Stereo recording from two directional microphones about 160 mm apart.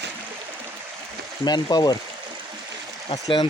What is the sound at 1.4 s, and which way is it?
Speech, 25° left (ahead or behind).